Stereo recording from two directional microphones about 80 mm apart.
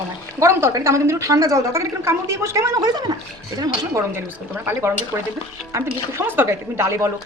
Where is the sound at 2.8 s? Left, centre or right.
Right.